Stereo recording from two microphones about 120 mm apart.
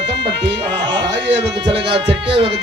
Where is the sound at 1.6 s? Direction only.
45° right (ahead or behind).